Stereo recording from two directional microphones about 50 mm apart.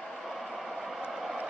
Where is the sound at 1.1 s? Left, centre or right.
Centre.